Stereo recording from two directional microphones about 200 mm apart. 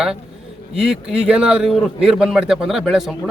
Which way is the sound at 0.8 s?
5° right (ahead or behind).